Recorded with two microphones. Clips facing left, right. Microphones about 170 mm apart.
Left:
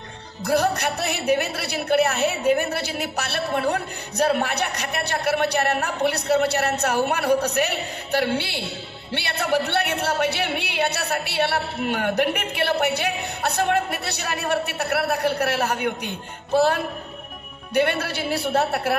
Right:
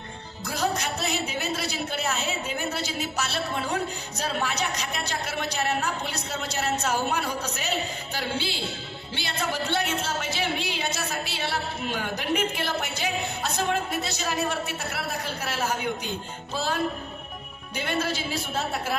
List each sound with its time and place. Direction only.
0.4 s a man's voice: 65° left (ahead or behind)